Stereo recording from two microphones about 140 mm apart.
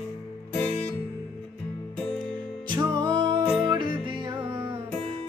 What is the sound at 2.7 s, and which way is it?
Music, 30° right (ahead or behind).